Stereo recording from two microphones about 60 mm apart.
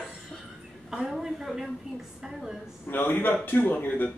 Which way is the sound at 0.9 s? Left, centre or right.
Centre.